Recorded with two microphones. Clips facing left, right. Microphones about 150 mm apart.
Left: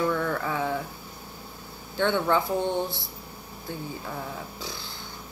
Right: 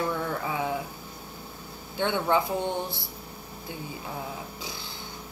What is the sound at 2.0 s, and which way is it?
Speech, 15° right (ahead or behind).